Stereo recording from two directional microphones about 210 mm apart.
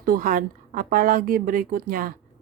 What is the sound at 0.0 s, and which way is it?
Speech, 40° right (ahead or behind).